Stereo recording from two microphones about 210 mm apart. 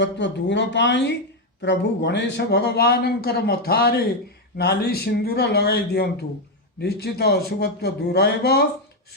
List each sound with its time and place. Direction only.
0.0 s speech: 60° left (ahead or behind)